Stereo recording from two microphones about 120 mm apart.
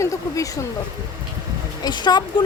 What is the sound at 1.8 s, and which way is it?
Speech, 35° left (ahead or behind).